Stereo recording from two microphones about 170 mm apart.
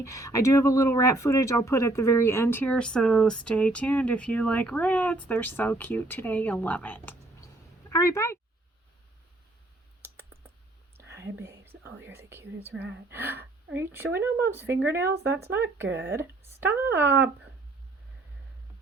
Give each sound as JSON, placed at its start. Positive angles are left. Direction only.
{"t": 0.0, "sound": "speech", "side_deg": 20}
{"t": 10.9, "sound": "whispering", "side_deg": -15}
{"t": 12.0, "sound": "speech", "side_deg": -15}